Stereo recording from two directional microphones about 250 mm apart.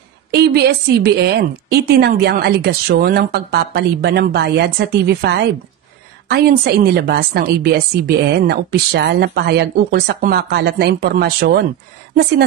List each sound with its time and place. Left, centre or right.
0.3 s a woman's voice: right